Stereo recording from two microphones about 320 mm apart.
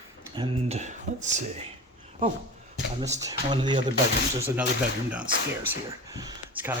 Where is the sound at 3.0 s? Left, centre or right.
Centre.